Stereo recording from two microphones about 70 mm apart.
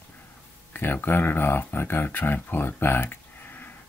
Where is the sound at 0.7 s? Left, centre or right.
Left.